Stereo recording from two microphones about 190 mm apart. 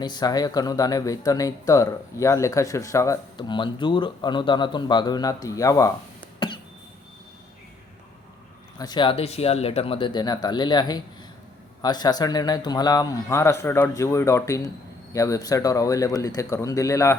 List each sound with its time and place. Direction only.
0.0 s speech: 20° left (ahead or behind)
6.4 s cough: 25° left (ahead or behind)
8.8 s a man's voice: 25° left (ahead or behind)